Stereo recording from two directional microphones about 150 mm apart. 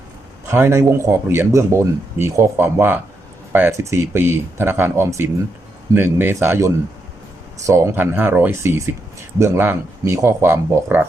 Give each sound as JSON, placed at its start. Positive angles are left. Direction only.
{"t": 0.4, "sound": "speech", "side_deg": -15}